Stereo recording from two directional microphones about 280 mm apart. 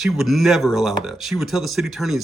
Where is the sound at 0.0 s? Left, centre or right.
Centre.